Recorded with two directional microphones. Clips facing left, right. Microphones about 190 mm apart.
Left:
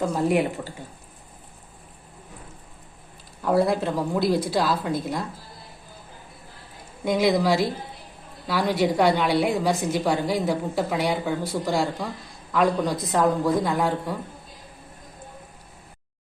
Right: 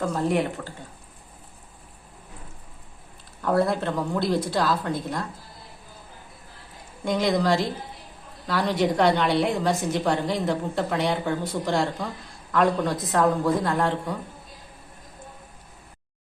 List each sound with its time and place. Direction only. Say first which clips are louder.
0.0 s speech: left 2 dB; 10° left (ahead or behind)
3.4 s a woman's voice: left 1 dB; centre (ahead or behind)
7.0 s a woman's voice: left 2 dB; 5° left (ahead or behind)